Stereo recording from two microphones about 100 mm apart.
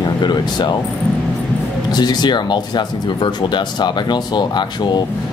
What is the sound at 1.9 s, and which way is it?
Speech, 45° left (ahead or behind).